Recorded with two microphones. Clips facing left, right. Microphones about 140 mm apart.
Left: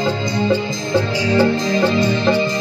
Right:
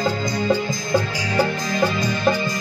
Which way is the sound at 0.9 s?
25° left (ahead or behind).